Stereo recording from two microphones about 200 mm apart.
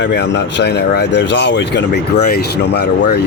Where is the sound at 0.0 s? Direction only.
60° left (ahead or behind).